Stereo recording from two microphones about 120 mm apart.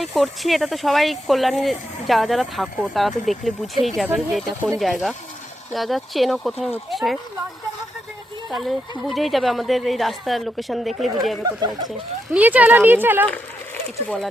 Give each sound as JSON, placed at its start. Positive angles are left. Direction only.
{"t": 0.0, "sound": "speech", "side_deg": 0}
{"t": 4.0, "sound": "speech", "side_deg": -10}
{"t": 4.8, "sound": "speech", "side_deg": 0}
{"t": 8.4, "sound": "speech", "side_deg": 0}
{"t": 11.4, "sound": "speech", "side_deg": -35}
{"t": 12.3, "sound": "speech", "side_deg": -15}